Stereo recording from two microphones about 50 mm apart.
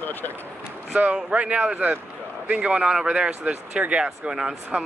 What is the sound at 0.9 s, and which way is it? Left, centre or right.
Speech, right.